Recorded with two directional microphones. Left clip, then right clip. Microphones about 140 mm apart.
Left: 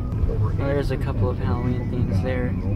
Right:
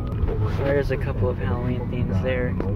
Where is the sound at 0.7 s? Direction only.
10° left (ahead or behind).